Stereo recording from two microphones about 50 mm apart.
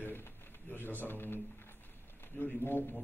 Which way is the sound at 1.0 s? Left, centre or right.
Left.